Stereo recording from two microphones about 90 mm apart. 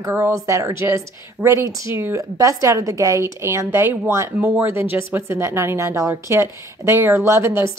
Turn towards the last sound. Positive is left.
turn(degrees=-30)  # may be behind; listen again after turning